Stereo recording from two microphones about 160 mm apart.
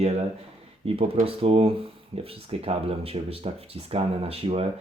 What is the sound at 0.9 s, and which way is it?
Speech, 35° right (ahead or behind).